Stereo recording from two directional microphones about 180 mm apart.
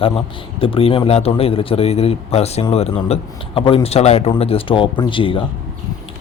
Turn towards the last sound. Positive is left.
turn(degrees=30)  # may be behind; listen again after turning